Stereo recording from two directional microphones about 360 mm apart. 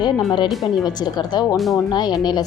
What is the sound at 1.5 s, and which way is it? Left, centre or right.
Speech, centre.